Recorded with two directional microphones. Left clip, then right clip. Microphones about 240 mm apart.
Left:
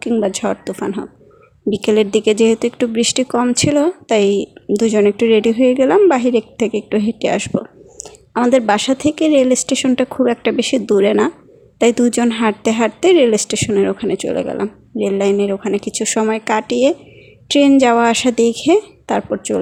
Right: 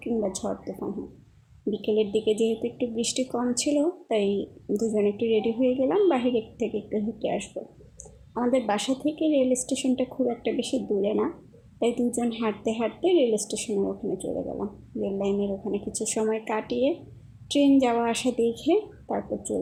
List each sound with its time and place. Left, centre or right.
0.0 s speech: left